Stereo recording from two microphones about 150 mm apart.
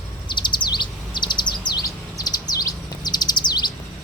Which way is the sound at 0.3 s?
30° left (ahead or behind).